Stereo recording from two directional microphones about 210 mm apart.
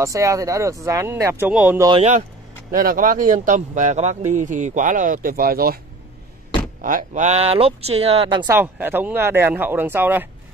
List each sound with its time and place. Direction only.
0.0 s speech: 15° right (ahead or behind)
1.9 s speech: 30° right (ahead or behind)
2.7 s speech: 40° right (ahead or behind)
6.8 s speech: 40° right (ahead or behind); by 8.5 s 25° right (ahead or behind)
8.5 s speech: 10° right (ahead or behind)